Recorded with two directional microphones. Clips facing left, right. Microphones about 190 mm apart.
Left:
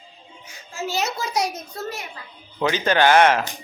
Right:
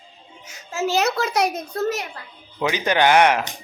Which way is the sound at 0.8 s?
60° right (ahead or behind).